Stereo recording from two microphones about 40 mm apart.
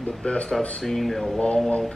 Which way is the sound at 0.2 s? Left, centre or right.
Left.